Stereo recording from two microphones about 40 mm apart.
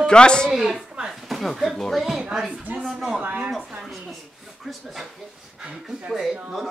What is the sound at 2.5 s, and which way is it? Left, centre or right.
Speech, right.